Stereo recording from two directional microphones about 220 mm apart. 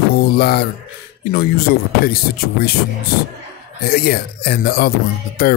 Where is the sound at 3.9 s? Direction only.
45° left (ahead or behind).